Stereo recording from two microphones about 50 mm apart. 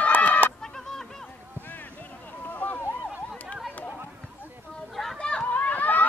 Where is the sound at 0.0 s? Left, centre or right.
Left.